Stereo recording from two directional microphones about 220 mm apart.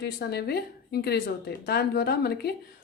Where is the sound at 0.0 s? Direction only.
45° left (ahead or behind).